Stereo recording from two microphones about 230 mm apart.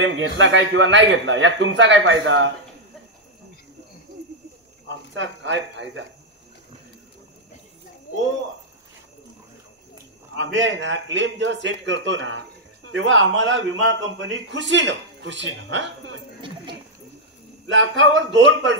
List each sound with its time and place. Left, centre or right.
0.0 s a man's voice: right
5.1 s a man's voice: right
10.3 s a man's voice: right
16.3 s a sound: right
17.6 s a man's voice: right